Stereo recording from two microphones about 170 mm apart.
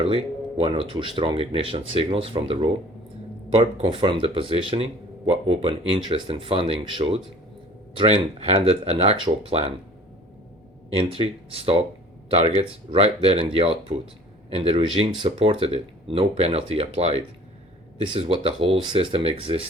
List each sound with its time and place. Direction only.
0.0 s speech: 35° right (ahead or behind)
10.9 s speech: 35° right (ahead or behind)